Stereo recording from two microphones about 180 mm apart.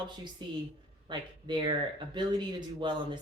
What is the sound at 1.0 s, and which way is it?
Speech, 25° right (ahead or behind).